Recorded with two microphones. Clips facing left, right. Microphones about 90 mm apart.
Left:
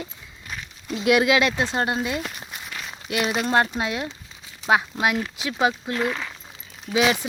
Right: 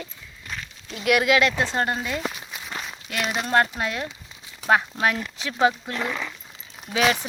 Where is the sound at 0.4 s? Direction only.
5° left (ahead or behind).